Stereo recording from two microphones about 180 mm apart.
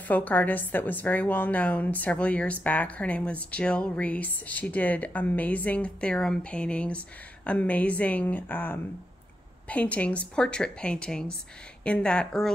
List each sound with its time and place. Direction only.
0.1 s a woman's voice: 10° left (ahead or behind)